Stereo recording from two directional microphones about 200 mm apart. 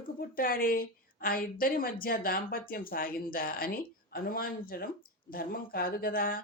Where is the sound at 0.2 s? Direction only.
45° left (ahead or behind).